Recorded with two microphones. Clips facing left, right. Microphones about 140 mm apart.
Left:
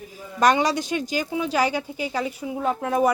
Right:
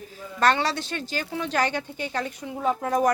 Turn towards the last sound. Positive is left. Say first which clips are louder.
# left 1 dB
turn(degrees=5)  # may be behind; listen again after turning